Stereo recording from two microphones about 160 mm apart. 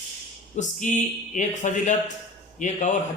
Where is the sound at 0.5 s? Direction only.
50° left (ahead or behind).